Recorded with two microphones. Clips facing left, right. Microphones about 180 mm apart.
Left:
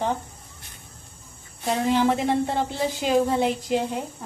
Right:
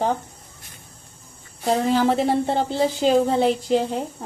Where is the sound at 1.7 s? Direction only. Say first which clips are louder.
Right 2 dB; 30° right (ahead or behind).